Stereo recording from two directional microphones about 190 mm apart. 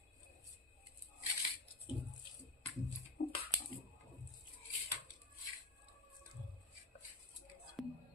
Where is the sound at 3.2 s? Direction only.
70° left (ahead or behind).